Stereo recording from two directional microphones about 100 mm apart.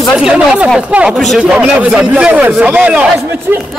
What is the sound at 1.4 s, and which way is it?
Speech, 10° right (ahead or behind).